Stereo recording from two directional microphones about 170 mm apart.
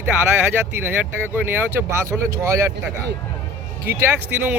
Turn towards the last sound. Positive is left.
turn(degrees=-15)  # may be behind; listen again after turning